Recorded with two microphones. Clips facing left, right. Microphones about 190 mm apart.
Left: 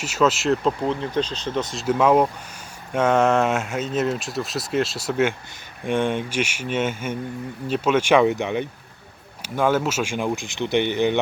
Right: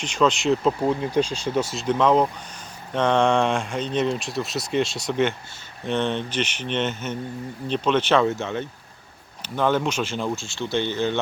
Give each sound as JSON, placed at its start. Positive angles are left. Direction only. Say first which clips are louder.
{"t": 0.0, "sound": "speech", "louder": "left 1 dB", "side_deg": 5}
{"t": 0.9, "sound": "speech", "louder": "right 2 dB", "side_deg": -10}